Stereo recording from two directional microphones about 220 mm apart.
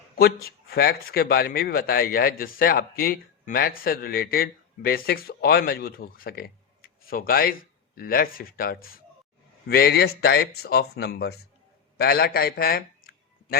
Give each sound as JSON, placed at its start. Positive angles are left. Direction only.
{"t": 0.2, "sound": "a man's voice", "side_deg": 45}